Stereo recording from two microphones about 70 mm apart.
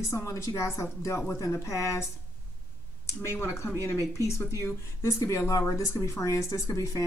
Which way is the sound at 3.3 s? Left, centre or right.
Left.